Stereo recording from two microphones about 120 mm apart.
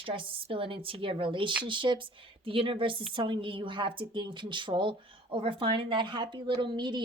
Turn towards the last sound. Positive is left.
turn(degrees=-40)  # may be behind; listen again after turning